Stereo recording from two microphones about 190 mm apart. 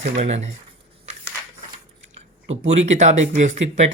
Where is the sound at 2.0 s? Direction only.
90° right.